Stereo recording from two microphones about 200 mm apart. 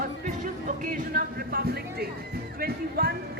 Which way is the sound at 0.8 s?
40° right (ahead or behind).